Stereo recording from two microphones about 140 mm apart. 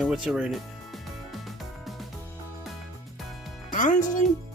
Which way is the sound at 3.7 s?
65° left (ahead or behind).